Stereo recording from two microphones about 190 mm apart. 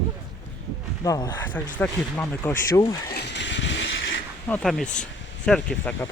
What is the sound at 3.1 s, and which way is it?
Vehicle, 70° left (ahead or behind).